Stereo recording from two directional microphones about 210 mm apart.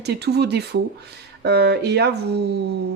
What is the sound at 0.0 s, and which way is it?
Speech, 50° right (ahead or behind).